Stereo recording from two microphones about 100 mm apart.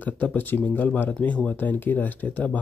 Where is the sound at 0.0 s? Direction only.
15° left (ahead or behind).